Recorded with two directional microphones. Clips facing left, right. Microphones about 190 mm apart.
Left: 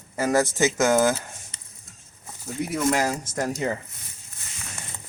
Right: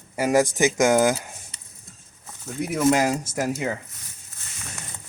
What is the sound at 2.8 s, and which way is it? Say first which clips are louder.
Speech: right 5 dB; 20° right (ahead or behind).